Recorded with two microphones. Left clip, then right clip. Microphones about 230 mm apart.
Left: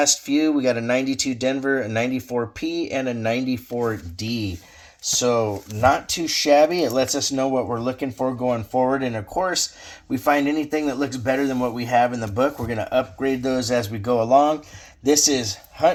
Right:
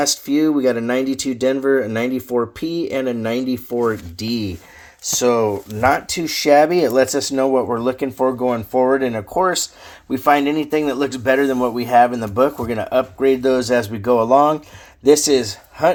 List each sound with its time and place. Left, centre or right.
0.0 s speech: right
5.2 s speech: right